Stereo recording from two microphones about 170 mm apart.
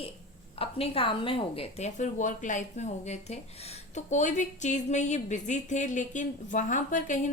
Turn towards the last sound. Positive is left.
turn(degrees=50)  # may be behind; listen again after turning